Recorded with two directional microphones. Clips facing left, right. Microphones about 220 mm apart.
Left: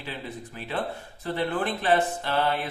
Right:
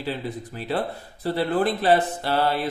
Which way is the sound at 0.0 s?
35° right (ahead or behind).